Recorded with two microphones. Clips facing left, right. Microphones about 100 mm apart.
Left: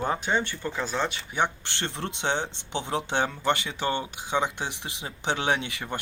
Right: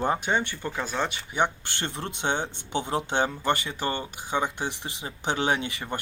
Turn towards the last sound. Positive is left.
turn(degrees=0)  # may be behind; listen again after turning